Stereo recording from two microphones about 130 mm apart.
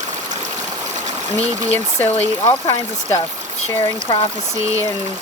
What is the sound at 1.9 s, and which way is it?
Speech, 15° left (ahead or behind).